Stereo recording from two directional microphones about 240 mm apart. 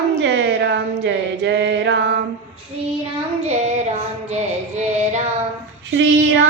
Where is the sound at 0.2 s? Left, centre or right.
Right.